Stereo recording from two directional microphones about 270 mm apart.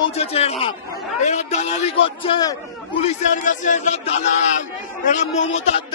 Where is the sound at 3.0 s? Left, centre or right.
Left.